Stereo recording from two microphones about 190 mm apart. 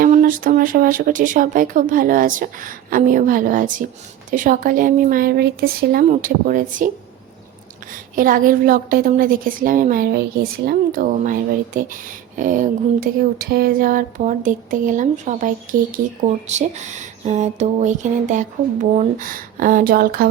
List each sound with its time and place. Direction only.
0.0 s speech: 45° right (ahead or behind)
8.1 s speech: 45° right (ahead or behind)